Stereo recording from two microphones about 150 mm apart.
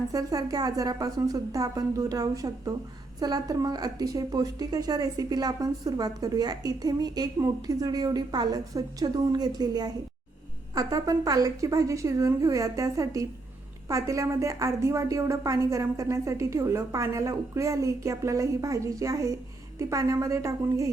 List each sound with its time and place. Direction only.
0.1 s a woman's voice: 25° right (ahead or behind)